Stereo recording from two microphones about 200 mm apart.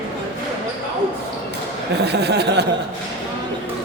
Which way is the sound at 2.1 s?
55° right (ahead or behind).